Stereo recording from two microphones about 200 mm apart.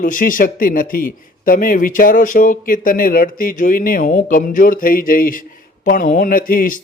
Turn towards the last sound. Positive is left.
turn(degrees=45)  # may be behind; listen again after turning